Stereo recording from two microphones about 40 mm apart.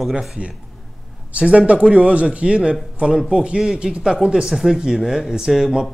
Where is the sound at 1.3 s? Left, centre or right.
Right.